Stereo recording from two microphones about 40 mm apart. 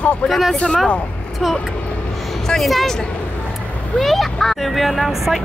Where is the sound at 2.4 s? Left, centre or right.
Centre.